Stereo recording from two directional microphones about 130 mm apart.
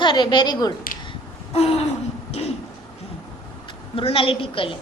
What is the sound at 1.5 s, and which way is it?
Speech, 50° left (ahead or behind).